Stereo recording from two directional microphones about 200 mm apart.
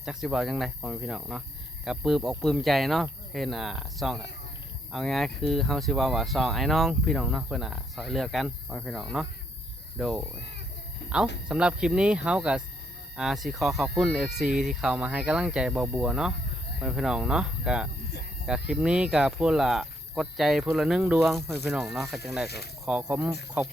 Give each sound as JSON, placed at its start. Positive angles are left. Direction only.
{"t": 0.0, "sound": "speech", "side_deg": -5}
{"t": 11.0, "sound": "cricket", "side_deg": 60}
{"t": 11.4, "sound": "speech", "side_deg": -5}
{"t": 22.4, "sound": "speech", "side_deg": 55}
{"t": 22.9, "sound": "speech", "side_deg": -5}